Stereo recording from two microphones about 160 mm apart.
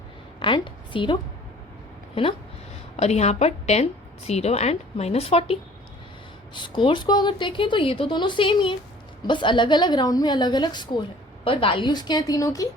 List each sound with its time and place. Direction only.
0.3 s a woman's voice: 30° left (ahead or behind)
2.9 s a woman's voice: 45° left (ahead or behind); by 12.6 s 20° left (ahead or behind)